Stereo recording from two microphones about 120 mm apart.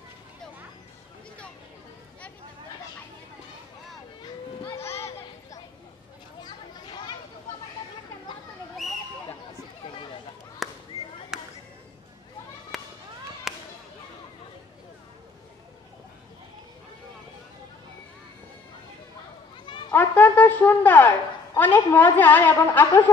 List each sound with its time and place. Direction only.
4.6 s children playing: 20° left (ahead or behind)
6.4 s a sound: 40° left (ahead or behind)
10.6 s a sound: centre (ahead or behind)
12.7 s fireworks: centre (ahead or behind)
19.6 s children playing: 40° left (ahead or behind)
19.9 s a woman's voice: 15° left (ahead or behind)